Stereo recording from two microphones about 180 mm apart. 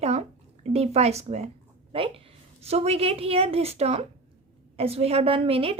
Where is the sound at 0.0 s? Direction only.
35° right (ahead or behind).